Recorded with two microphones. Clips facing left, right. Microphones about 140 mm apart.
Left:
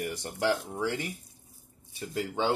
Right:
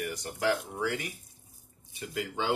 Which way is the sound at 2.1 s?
35° left (ahead or behind).